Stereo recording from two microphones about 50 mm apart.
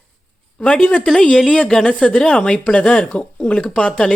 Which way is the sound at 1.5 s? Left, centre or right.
Centre.